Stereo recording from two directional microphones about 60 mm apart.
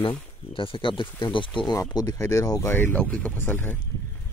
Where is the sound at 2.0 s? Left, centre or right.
Left.